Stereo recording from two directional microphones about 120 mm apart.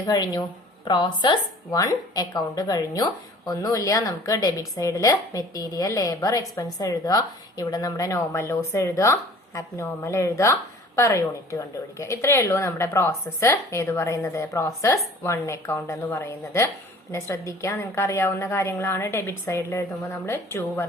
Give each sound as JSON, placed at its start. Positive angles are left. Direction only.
{"t": 0.0, "sound": "a woman's voice", "side_deg": 35}